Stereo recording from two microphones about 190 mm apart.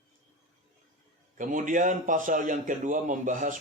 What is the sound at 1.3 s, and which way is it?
A man's voice, 45° right (ahead or behind).